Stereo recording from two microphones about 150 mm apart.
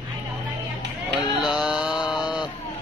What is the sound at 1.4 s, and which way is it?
Mantra, 5° right (ahead or behind).